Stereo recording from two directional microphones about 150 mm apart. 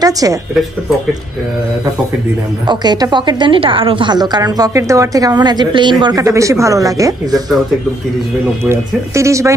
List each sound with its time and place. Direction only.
0.0 s a woman's voice: 25° right (ahead or behind)
2.6 s a woman's voice: 30° right (ahead or behind)
8.6 s a woman's voice: 20° right (ahead or behind)